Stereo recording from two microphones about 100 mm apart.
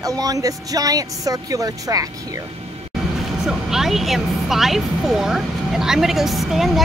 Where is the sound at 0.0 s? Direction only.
35° right (ahead or behind).